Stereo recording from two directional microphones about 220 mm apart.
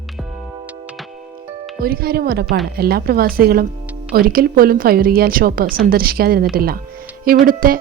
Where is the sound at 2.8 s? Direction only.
45° right (ahead or behind).